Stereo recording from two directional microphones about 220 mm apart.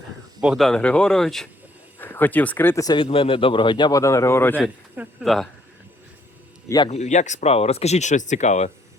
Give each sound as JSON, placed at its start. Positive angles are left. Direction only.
{"t": 0.4, "sound": "speech", "side_deg": 0}
{"t": 6.7, "sound": "a man's voice", "side_deg": 20}
{"t": 6.9, "sound": "speech", "side_deg": 30}